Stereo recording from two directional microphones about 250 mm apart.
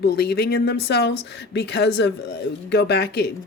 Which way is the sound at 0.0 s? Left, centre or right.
Left.